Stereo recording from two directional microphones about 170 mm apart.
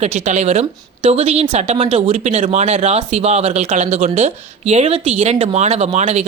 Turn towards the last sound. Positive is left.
turn(degrees=-40)  # may be behind; listen again after turning